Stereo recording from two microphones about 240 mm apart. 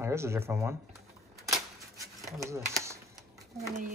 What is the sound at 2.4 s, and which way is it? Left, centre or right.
Speech, centre.